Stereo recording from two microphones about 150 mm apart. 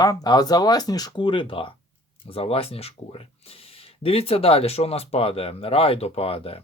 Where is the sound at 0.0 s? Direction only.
25° left (ahead or behind).